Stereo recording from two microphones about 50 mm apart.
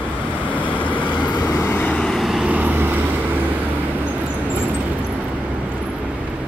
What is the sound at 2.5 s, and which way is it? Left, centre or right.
Vehicle, right.